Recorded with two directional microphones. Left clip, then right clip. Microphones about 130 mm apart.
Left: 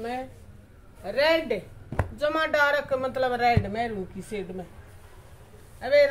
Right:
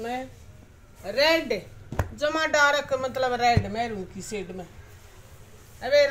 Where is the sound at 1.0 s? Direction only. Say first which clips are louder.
Right 1 dB; 10° right (ahead or behind).